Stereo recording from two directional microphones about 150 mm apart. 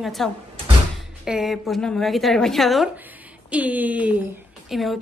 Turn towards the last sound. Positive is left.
turn(degrees=0)  # may be behind; listen again after turning